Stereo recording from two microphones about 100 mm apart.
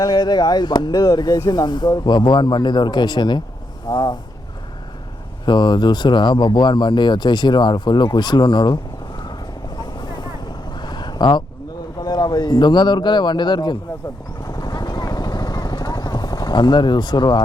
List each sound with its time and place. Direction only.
0.0 s speech: 45° left (ahead or behind)
5.5 s speech: 45° left (ahead or behind)
10.0 s vehicle: 45° left (ahead or behind)
11.9 s speech: 45° left (ahead or behind)
14.4 s vehicle: 40° left (ahead or behind)